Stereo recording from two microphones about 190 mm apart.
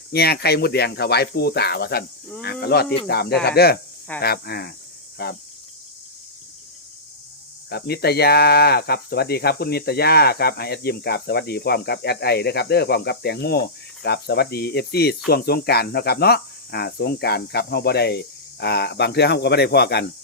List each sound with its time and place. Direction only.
0.1 s speech: 55° left (ahead or behind)
7.7 s speech: 60° left (ahead or behind)